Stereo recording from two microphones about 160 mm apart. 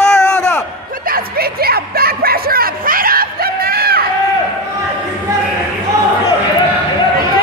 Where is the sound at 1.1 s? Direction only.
70° right (ahead or behind).